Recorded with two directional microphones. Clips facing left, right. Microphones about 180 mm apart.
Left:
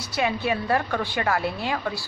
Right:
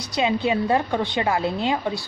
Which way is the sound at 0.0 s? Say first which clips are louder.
Right 3 dB; 20° right (ahead or behind).